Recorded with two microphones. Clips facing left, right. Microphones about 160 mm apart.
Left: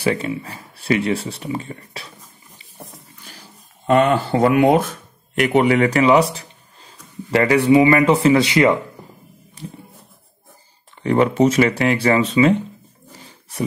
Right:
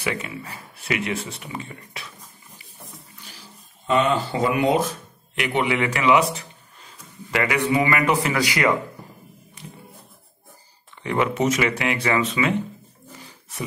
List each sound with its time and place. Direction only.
0.0 s speech: 35° left (ahead or behind)
3.3 s speech: 55° left (ahead or behind); by 6.2 s 35° left (ahead or behind)
6.3 s a sound: 30° left (ahead or behind)
7.8 s speech: 30° left (ahead or behind)
9.6 s a sound: 35° left (ahead or behind)
11.0 s speech: 35° left (ahead or behind)